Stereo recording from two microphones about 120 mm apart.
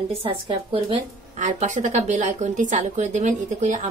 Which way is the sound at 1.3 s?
90° right.